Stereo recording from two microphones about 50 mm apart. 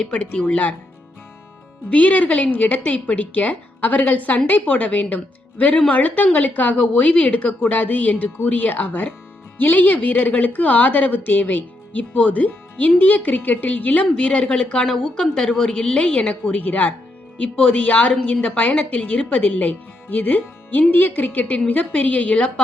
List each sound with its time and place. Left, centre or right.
0.0 s a woman's voice: left
1.9 s a woman's voice: left